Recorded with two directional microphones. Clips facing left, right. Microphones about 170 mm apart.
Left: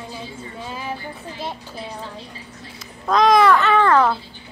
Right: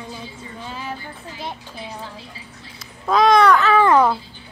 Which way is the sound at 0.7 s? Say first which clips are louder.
Left 1 dB; 10° left (ahead or behind).